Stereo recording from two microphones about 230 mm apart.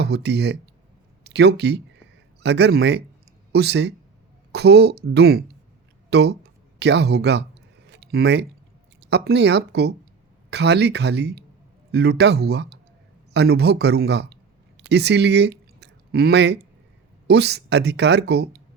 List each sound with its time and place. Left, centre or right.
0.0 s speech: right
7.9 s a sound: right
9.0 s speech: right